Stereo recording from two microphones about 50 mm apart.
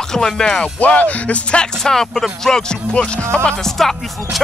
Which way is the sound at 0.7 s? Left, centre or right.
Left.